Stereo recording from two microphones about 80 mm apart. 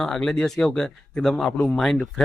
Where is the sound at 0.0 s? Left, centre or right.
Centre.